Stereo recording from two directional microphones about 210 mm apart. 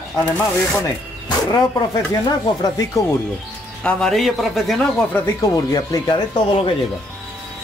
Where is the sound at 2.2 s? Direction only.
20° left (ahead or behind).